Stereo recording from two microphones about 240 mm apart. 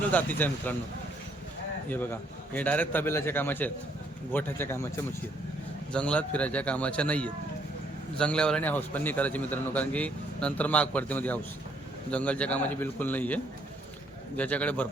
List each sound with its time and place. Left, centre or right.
0.0 s a man's voice: centre
1.9 s a man's voice: centre